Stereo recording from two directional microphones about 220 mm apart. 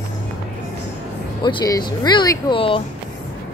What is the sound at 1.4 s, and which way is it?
Speech, 20° left (ahead or behind).